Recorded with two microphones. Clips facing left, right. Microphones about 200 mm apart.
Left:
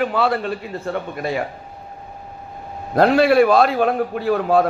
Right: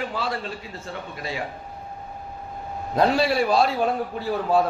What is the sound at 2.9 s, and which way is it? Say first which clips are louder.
A man's voice: left 6 dB; 60° left (ahead or behind).